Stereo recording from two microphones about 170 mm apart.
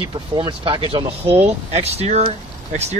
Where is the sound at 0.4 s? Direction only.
30° right (ahead or behind).